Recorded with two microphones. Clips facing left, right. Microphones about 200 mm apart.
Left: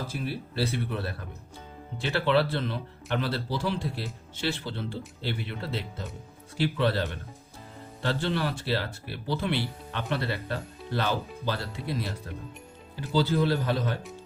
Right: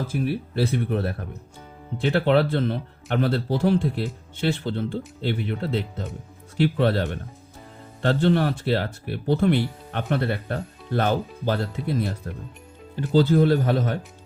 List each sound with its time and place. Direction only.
0.1 s speech: 50° right (ahead or behind)
13.1 s speech: 50° right (ahead or behind)